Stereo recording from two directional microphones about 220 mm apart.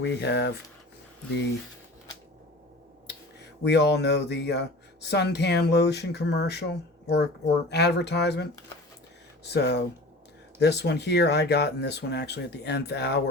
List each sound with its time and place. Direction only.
0.0 s speech: 50° left (ahead or behind)
3.6 s speech: 50° left (ahead or behind)